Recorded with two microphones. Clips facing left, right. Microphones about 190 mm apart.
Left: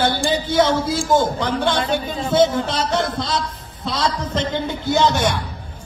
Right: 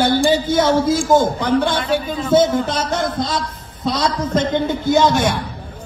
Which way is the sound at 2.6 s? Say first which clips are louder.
Right 1 dB; 50° right (ahead or behind).